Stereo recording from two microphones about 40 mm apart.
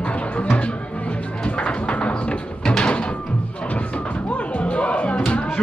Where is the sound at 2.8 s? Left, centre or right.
Left.